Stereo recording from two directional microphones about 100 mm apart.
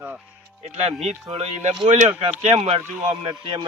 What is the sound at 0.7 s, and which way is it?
Speech, 90° right.